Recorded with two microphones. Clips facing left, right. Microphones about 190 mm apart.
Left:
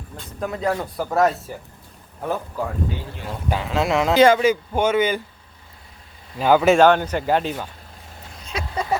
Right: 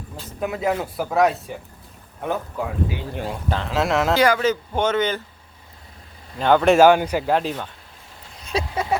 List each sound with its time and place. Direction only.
0.2 s speech: 5° right (ahead or behind)
3.3 s a man's voice: 10° left (ahead or behind)
4.1 s a man's voice: 25° left (ahead or behind)
4.4 s a man's voice: 10° left (ahead or behind)
6.4 s speech: 5° left (ahead or behind)
6.7 s speech: 10° right (ahead or behind)
8.7 s vehicle: 5° right (ahead or behind)